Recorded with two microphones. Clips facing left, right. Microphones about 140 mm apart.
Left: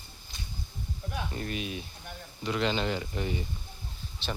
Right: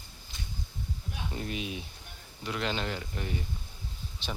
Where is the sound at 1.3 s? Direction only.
15° right (ahead or behind).